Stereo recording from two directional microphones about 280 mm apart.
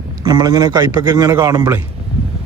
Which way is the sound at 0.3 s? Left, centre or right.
Centre.